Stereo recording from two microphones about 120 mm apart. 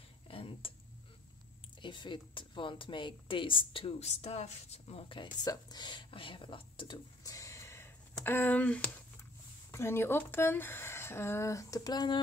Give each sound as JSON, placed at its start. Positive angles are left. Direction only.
{"t": 0.3, "sound": "a sound", "side_deg": 50}
{"t": 1.8, "sound": "speech", "side_deg": 40}
{"t": 5.4, "sound": "speech", "side_deg": 35}
{"t": 7.2, "sound": "a sound", "side_deg": 25}
{"t": 8.3, "sound": "speech", "side_deg": 15}
{"t": 9.7, "sound": "speech", "side_deg": 20}